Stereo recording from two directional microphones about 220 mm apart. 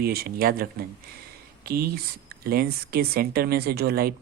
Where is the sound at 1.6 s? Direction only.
45° right (ahead or behind).